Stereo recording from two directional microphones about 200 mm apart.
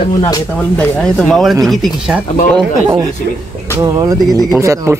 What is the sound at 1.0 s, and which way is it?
Speech, centre (ahead or behind).